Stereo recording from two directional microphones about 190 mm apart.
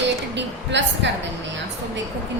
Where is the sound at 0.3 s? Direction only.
70° right (ahead or behind).